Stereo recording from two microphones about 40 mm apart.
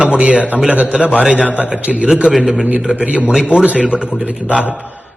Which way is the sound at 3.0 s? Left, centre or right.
Right.